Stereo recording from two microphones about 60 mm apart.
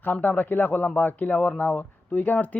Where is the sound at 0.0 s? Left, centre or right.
Left.